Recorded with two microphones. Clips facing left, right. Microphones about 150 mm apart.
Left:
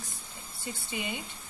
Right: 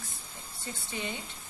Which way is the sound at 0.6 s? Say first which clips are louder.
Left 1 dB; 10° left (ahead or behind).